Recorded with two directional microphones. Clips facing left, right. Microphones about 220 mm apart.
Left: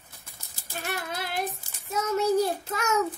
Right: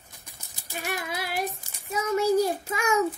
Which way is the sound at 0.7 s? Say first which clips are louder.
Right 1 dB; 15° right (ahead or behind).